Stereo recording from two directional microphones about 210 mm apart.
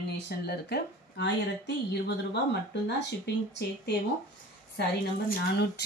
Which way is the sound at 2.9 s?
55° left (ahead or behind).